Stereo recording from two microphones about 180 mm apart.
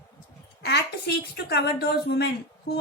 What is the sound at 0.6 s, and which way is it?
A woman's voice, 65° left (ahead or behind).